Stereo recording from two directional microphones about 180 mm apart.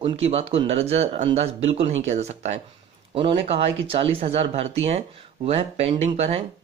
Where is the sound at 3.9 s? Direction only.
30° right (ahead or behind).